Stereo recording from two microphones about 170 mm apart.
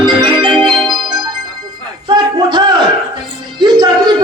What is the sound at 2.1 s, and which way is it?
Battle cry, 25° right (ahead or behind).